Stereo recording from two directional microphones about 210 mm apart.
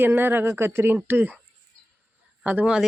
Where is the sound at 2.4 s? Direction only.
5° right (ahead or behind).